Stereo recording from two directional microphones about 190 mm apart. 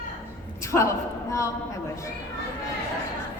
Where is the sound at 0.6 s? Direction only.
15° left (ahead or behind).